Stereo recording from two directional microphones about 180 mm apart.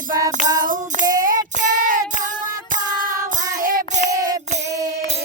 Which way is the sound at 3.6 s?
50° right (ahead or behind).